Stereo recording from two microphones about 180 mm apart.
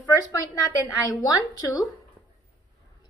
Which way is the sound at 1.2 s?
20° left (ahead or behind).